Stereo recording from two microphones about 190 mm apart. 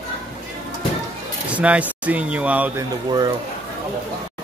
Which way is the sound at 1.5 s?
5° right (ahead or behind).